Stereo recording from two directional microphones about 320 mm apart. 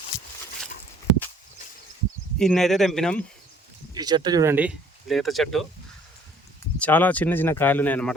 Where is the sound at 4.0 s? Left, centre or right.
Centre.